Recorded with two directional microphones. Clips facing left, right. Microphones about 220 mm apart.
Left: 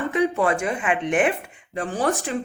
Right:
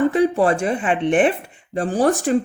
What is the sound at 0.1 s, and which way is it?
Speech, 35° right (ahead or behind).